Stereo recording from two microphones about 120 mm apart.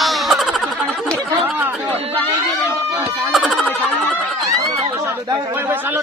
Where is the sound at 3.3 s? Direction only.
Centre (ahead or behind).